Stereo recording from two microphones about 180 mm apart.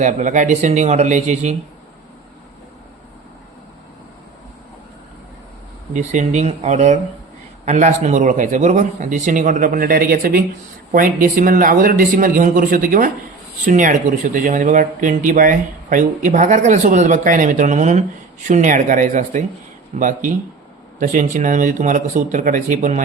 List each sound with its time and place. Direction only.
0.0 s speech: 45° right (ahead or behind)
5.9 s speech: 40° right (ahead or behind)